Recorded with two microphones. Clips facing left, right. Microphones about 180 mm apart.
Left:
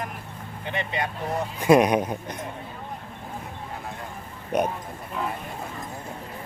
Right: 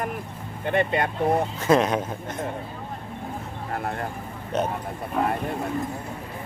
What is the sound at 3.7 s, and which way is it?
Vehicle, 60° right (ahead or behind).